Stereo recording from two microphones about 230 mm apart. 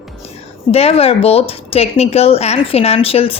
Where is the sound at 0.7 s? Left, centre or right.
Left.